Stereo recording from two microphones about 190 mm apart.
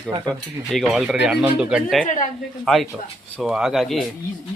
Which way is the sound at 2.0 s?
45° left (ahead or behind).